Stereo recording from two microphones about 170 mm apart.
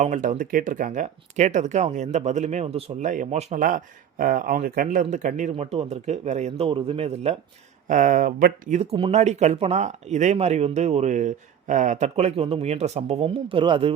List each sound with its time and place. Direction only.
0.0 s speech: 45° right (ahead or behind)
6.7 s speech: 30° right (ahead or behind)
7.9 s speech: 50° right (ahead or behind)
8.8 s speech: 35° right (ahead or behind)